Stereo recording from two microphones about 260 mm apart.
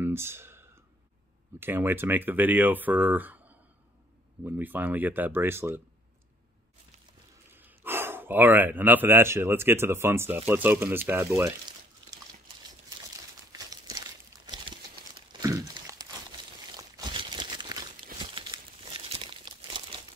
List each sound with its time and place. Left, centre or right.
0.0 s a sound: centre
1.6 s speech: centre
7.5 s speech: centre
13.5 s crumpling: centre
15.4 s a sound: centre
18.2 s crumpling: centre